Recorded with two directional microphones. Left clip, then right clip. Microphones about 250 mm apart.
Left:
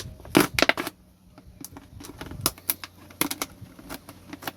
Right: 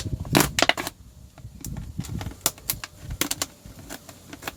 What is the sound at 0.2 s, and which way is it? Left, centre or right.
Crushing, centre.